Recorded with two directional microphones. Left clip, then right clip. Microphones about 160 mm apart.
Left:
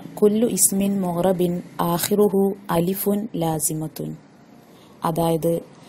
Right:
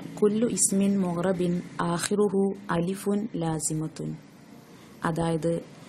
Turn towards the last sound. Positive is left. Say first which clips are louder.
# left 7 dB
turn(degrees=15)  # may be behind; listen again after turning